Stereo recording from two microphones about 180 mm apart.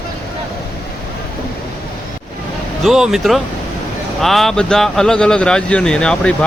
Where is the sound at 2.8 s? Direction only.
Centre (ahead or behind).